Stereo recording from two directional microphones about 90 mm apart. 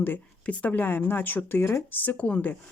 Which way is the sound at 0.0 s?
20° left (ahead or behind).